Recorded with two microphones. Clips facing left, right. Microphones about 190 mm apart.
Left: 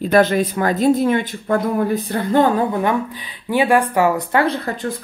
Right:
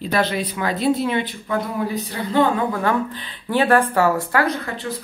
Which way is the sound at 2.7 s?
15° left (ahead or behind).